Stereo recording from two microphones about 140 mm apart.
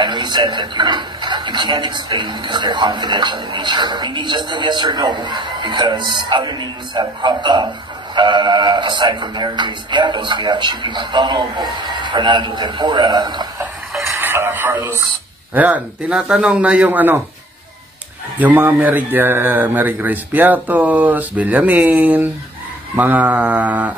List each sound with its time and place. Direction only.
0.0 s speech: 35° right (ahead or behind)
14.2 s speech: 15° right (ahead or behind)
18.4 s speech: 15° right (ahead or behind)